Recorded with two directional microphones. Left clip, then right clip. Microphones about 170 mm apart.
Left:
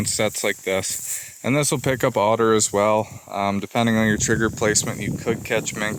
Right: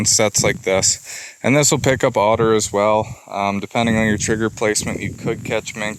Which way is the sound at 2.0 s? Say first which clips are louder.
Right 2 dB; 35° right (ahead or behind).